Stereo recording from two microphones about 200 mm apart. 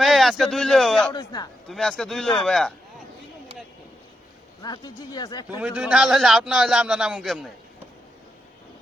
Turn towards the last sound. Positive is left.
turn(degrees=0)  # may be behind; listen again after turning